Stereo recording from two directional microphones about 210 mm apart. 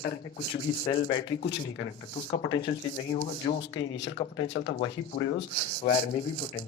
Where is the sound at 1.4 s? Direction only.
55° left (ahead or behind).